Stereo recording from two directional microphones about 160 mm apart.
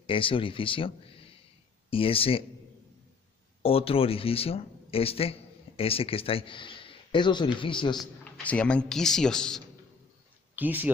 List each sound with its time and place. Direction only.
0.0 s speech: 35° left (ahead or behind)
3.6 s a man's voice: 35° left (ahead or behind)
8.2 s speech: 10° left (ahead or behind)
10.5 s speech: 10° right (ahead or behind)